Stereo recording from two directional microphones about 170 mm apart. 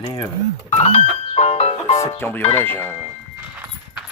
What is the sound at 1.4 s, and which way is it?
Music, 40° left (ahead or behind).